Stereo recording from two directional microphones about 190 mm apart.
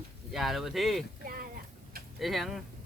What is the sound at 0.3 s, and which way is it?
Speech, centre (ahead or behind).